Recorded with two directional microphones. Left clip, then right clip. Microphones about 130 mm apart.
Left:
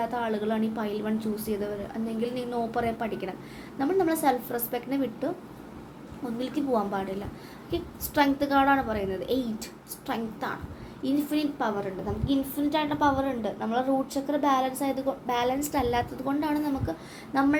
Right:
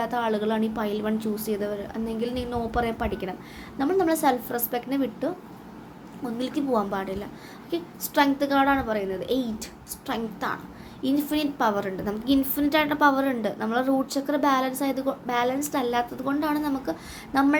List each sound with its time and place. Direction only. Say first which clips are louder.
0.0 s a woman's voice: right 3 dB; 35° right (ahead or behind)
6.4 s a woman's voice: right 2 dB; 30° right (ahead or behind)
11.6 s a woman's voice: right 5 dB; 60° right (ahead or behind); by 17.5 s 40° right (ahead or behind)